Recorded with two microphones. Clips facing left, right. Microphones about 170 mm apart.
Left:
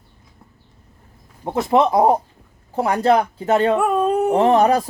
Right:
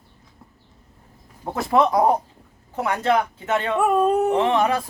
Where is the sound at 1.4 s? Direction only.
20° left (ahead or behind); by 3.8 s 35° left (ahead or behind).